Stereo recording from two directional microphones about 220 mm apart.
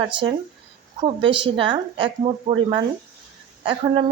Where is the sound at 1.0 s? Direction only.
20° right (ahead or behind).